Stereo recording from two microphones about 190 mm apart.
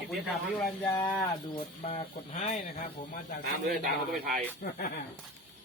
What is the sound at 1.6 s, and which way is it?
Speech, 30° left (ahead or behind).